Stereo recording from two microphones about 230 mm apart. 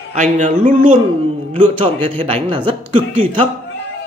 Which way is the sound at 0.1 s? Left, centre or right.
Right.